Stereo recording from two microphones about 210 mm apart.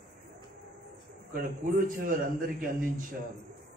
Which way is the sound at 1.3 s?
40° right (ahead or behind).